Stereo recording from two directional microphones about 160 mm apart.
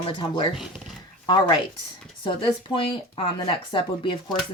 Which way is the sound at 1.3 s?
30° left (ahead or behind).